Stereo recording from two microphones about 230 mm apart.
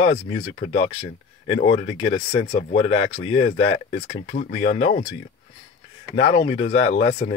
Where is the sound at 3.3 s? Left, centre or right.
Left.